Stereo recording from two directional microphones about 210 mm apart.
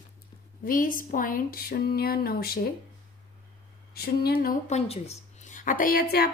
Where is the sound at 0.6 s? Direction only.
40° left (ahead or behind).